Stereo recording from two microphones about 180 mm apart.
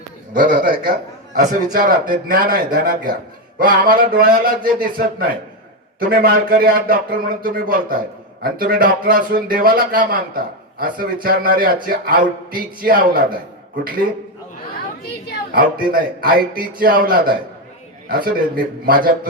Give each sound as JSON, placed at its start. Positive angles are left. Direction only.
{"t": 0.3, "sound": "a man's voice", "side_deg": -50}
{"t": 15.5, "sound": "a man's voice", "side_deg": -55}